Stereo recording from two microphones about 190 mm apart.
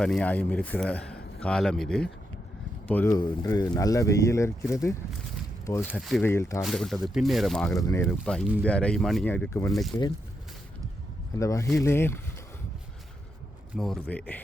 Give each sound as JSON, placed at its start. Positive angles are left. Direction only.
{"t": 0.0, "sound": "speech", "side_deg": 5}
{"t": 3.2, "sound": "speech", "side_deg": 20}
{"t": 5.8, "sound": "speech", "side_deg": 0}
{"t": 6.2, "sound": "speech", "side_deg": 15}
{"t": 6.6, "sound": "speech", "side_deg": 0}
{"t": 7.8, "sound": "speech", "side_deg": 15}
{"t": 8.0, "sound": "speech", "side_deg": 0}
{"t": 11.3, "sound": "speech", "side_deg": 15}
{"t": 13.7, "sound": "speech", "side_deg": 0}